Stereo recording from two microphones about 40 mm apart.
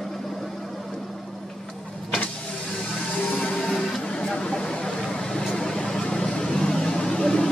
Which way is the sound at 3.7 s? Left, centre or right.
Centre.